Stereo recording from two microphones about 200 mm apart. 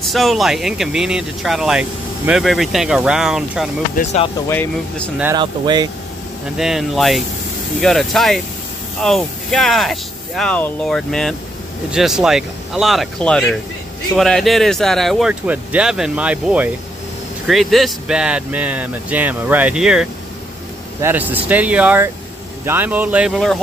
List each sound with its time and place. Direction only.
0.0 s speech: centre (ahead or behind)
5.2 s speech: 20° right (ahead or behind)
6.5 s speech: centre (ahead or behind)